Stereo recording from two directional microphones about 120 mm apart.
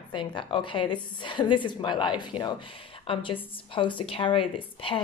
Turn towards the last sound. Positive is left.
turn(degrees=50)  # may be behind; listen again after turning